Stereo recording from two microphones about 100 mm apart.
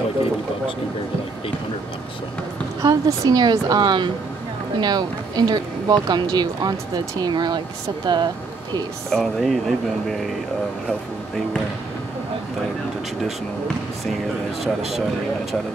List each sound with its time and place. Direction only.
2.8 s speech: 40° right (ahead or behind)
9.1 s speech: centre (ahead or behind)